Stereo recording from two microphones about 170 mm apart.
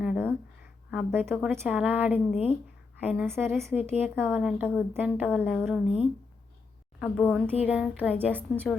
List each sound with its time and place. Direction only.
0.0 s a sound: 5° right (ahead or behind)
0.9 s a woman's voice: 10° right (ahead or behind)
2.3 s speech: 35° left (ahead or behind)
3.0 s a woman's voice: 10° right (ahead or behind)
7.0 s a woman's voice: 5° left (ahead or behind)
7.6 s a woman's voice: 10° right (ahead or behind)